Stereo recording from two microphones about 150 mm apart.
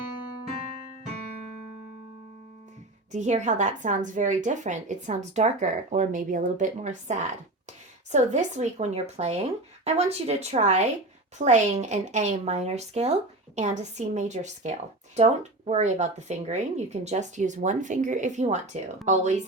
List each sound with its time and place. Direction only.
3.1 s a woman's voice: 50° right (ahead or behind)